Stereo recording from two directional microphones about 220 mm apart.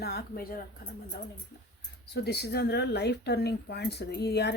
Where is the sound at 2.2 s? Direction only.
50° left (ahead or behind).